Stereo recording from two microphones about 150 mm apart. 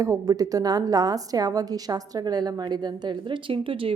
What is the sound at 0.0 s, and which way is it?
A woman's voice, 25° right (ahead or behind).